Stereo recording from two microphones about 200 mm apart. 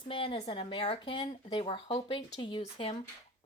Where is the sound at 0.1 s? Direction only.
25° left (ahead or behind).